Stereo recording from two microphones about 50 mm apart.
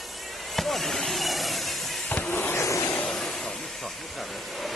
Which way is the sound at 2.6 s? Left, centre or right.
Left.